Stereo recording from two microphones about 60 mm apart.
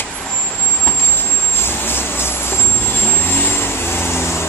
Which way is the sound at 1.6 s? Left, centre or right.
Left.